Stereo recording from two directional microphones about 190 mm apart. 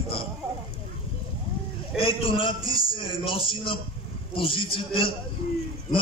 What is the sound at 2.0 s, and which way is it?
A man's voice, 30° left (ahead or behind).